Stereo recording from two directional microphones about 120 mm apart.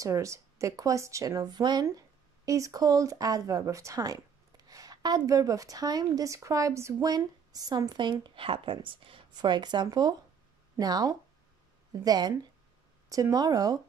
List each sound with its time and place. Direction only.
0.0 s speech: 25° right (ahead or behind)